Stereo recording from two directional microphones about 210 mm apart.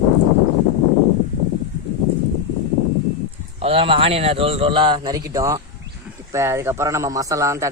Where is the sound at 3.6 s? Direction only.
25° right (ahead or behind).